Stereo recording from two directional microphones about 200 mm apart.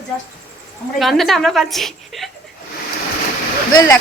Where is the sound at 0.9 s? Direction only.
Centre (ahead or behind).